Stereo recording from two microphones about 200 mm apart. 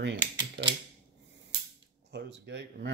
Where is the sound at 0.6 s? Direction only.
50° right (ahead or behind).